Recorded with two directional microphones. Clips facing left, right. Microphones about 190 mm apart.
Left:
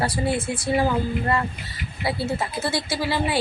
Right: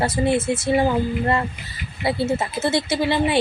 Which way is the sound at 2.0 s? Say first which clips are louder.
Right 4 dB; 20° right (ahead or behind).